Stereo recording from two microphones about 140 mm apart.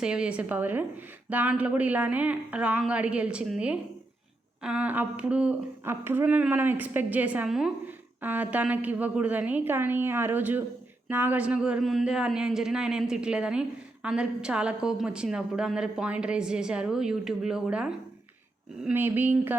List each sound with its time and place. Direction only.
0.0 s speech: 5° right (ahead or behind)